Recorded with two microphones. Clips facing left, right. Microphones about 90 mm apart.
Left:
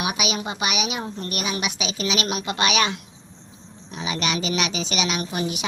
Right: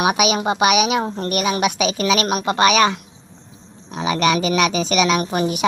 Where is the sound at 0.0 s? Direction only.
60° right (ahead or behind).